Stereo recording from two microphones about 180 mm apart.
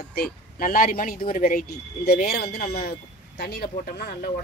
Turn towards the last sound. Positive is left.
turn(degrees=60)  # may be behind; listen again after turning